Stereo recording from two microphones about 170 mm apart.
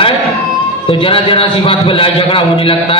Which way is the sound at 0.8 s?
30° left (ahead or behind).